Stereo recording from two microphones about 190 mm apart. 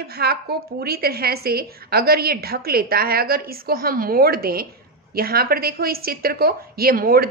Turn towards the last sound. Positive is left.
turn(degrees=-50)  # may be behind; listen again after turning